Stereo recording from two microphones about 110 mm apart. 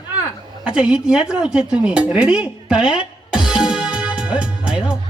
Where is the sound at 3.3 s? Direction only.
5° right (ahead or behind).